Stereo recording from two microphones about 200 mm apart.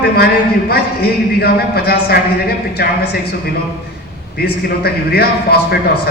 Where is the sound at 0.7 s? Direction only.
50° left (ahead or behind).